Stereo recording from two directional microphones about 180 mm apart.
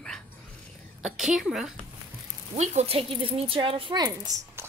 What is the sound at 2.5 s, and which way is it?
A woman's voice, 35° right (ahead or behind).